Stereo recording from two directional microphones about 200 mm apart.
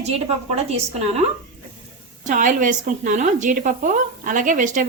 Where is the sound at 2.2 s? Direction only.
40° right (ahead or behind).